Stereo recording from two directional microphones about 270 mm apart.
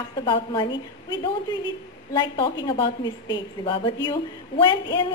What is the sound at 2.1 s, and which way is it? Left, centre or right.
A woman's voice, centre.